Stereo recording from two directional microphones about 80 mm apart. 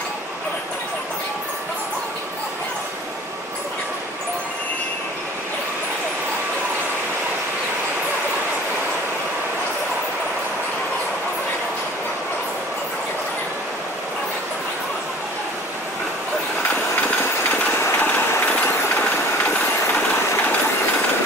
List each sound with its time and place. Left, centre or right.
17.2 s train: left
19.4 s vehicle: centre